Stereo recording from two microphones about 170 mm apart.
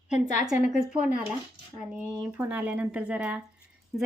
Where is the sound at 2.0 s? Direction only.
10° right (ahead or behind).